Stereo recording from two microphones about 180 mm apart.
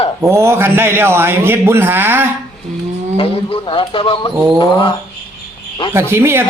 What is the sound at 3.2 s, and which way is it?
Speech, 30° left (ahead or behind).